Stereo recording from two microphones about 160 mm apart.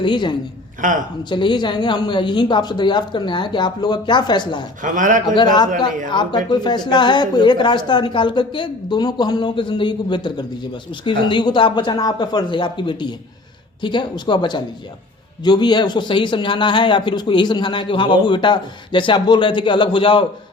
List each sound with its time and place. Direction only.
0.0 s a man's voice: 30° left (ahead or behind)
0.8 s speech: 55° right (ahead or behind)
1.3 s a man's voice: 30° left (ahead or behind)
4.8 s a man's voice: 55° right (ahead or behind)
5.3 s a man's voice: 30° left (ahead or behind)